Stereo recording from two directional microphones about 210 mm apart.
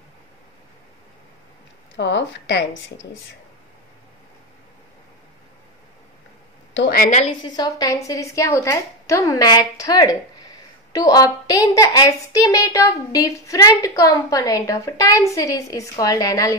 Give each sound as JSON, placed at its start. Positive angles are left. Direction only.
{"t": 2.0, "sound": "a woman's voice", "side_deg": 55}
{"t": 6.7, "sound": "speech", "side_deg": 50}
{"t": 7.4, "sound": "a woman's voice", "side_deg": 20}